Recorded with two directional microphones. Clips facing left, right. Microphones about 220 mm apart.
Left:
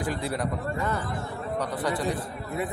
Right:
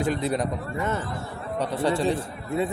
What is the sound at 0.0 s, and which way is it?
Speech, 20° right (ahead or behind).